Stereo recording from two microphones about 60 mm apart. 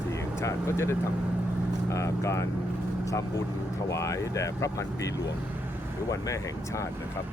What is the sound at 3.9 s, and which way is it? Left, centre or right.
Speech, left.